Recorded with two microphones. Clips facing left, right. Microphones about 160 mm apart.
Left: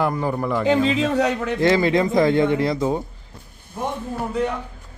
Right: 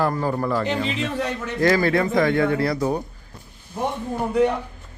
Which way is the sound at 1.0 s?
85° left.